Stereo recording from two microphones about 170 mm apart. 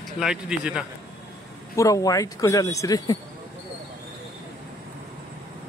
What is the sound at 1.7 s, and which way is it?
Speech, 20° left (ahead or behind).